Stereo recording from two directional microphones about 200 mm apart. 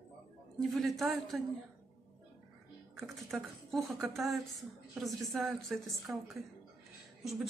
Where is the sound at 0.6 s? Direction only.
Centre (ahead or behind).